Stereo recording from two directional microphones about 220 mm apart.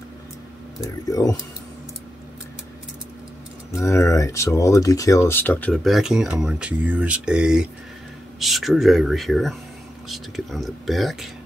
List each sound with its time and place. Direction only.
0.8 s speech: 15° left (ahead or behind)
3.7 s speech: 15° left (ahead or behind)